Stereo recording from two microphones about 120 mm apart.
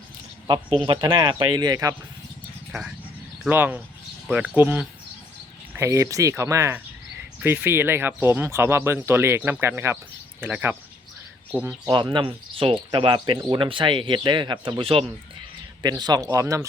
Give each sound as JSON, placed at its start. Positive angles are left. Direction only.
{"t": 0.4, "sound": "speech", "side_deg": -40}
{"t": 3.5, "sound": "speech", "side_deg": -15}
{"t": 11.9, "sound": "speech", "side_deg": -40}